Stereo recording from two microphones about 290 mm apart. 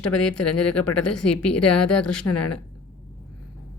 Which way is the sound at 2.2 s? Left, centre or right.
Left.